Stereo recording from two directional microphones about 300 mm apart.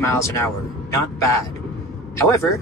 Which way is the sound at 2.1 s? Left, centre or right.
Centre.